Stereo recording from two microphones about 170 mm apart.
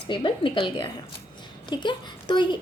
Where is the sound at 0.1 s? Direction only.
30° left (ahead or behind).